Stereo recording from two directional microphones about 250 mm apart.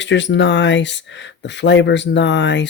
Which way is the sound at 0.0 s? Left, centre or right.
Left.